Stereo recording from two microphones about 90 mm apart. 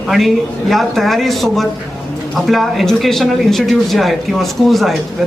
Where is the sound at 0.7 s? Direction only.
Centre (ahead or behind).